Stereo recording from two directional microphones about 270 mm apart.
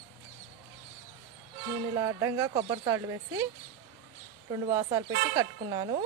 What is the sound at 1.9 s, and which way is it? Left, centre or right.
Speech, centre.